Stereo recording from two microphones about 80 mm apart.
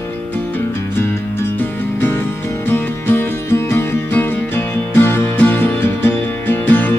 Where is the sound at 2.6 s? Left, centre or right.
Left.